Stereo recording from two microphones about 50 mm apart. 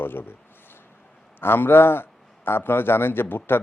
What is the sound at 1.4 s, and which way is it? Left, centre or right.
A man's voice, left.